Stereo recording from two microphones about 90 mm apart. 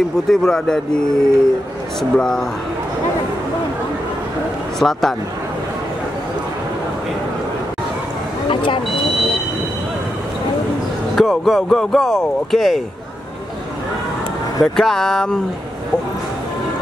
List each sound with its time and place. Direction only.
0.3 s speech: 5° left (ahead or behind)
4.7 s speech: 5° left (ahead or behind)
8.5 s speech: 70° left (ahead or behind)
9.0 s vehicle: centre (ahead or behind)
11.1 s speech: centre (ahead or behind)
14.8 s speech: 5° left (ahead or behind)